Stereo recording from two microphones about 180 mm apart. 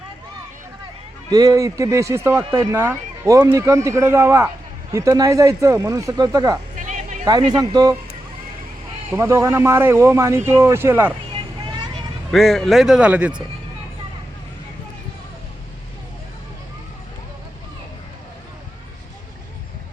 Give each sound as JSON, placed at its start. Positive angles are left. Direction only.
{"t": 1.3, "sound": "speech", "side_deg": -20}
{"t": 6.7, "sound": "a sound", "side_deg": -45}
{"t": 7.3, "sound": "speech", "side_deg": -20}
{"t": 9.1, "sound": "speech", "side_deg": -15}
{"t": 12.3, "sound": "speech", "side_deg": 0}